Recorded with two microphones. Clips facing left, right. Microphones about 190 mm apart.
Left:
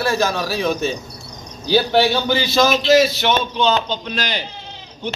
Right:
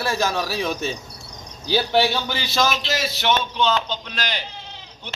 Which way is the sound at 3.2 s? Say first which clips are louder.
Left 3 dB; 15° left (ahead or behind).